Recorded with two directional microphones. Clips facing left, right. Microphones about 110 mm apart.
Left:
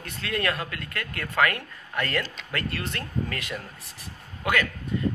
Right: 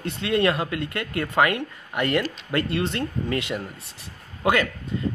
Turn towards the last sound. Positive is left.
turn(degrees=-25)  # may be behind; listen again after turning